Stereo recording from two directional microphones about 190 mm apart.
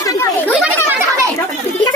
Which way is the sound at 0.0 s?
15° left (ahead or behind).